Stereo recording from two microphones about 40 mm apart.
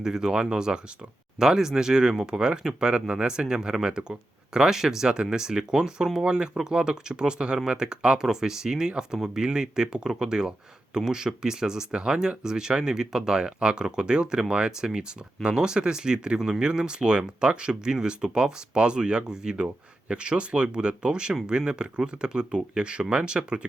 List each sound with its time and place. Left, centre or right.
0.0 s speech: centre